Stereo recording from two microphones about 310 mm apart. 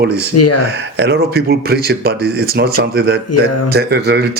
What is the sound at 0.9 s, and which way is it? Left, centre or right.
Speech, right.